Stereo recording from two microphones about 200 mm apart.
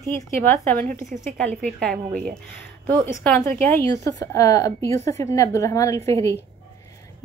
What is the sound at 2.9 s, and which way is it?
A woman's voice, 10° left (ahead or behind).